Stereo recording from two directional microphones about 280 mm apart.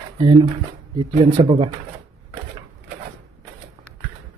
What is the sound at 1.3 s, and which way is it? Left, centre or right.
Speech, centre.